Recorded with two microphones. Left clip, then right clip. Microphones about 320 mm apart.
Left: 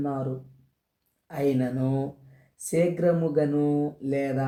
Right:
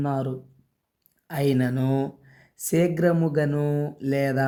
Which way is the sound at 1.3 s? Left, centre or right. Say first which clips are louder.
Right 2 dB; right.